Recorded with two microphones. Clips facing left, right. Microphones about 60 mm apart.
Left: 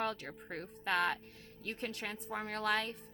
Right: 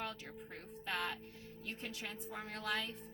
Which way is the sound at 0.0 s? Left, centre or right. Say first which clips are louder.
Left 7 dB; left.